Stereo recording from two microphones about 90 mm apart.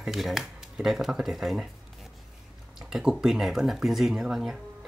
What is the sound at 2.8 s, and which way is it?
Speech, 5° right (ahead or behind).